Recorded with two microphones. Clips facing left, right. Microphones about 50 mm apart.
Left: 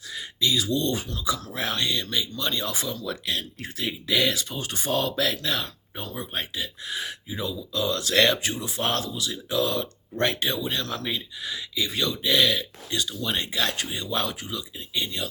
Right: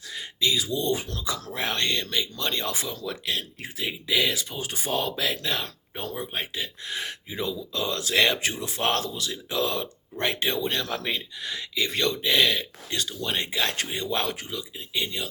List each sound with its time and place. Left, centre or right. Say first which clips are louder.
0.1 s speech: even; right
1.3 s speech: left 2 dB; right
3.6 s speech: left 1 dB; centre
4.3 s speech: left 1 dB; right
8.1 s speech: left 2 dB; centre
8.6 s speech: right 3 dB; right
10.7 s speech: right 1 dB; right
11.4 s speech: right 1 dB; right
12.2 s speech: left 2 dB; right